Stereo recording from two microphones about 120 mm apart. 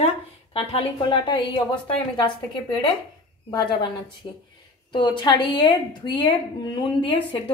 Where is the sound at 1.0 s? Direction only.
40° left (ahead or behind).